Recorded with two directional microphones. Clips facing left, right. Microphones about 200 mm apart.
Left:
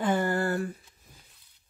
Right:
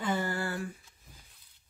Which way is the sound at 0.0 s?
50° left (ahead or behind).